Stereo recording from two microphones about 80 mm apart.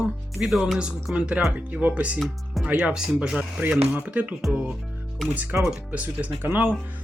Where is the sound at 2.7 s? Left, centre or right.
Centre.